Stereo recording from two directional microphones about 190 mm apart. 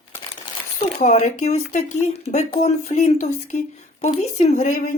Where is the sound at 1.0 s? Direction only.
40° left (ahead or behind).